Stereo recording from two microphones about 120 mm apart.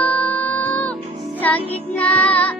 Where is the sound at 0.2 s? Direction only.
15° left (ahead or behind).